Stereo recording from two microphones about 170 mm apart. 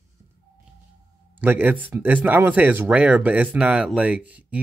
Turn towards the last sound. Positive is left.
turn(degrees=-10)  # may be behind; listen again after turning